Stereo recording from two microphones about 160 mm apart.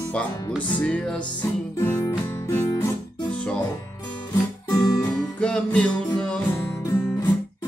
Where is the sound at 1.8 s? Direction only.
15° left (ahead or behind).